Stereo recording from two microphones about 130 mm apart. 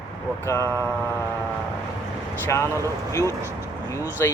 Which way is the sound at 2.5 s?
20° left (ahead or behind).